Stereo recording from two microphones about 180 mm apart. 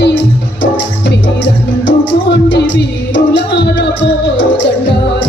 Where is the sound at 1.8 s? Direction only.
80° left.